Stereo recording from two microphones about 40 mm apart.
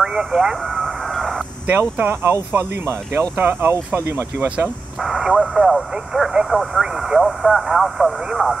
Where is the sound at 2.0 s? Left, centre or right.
Right.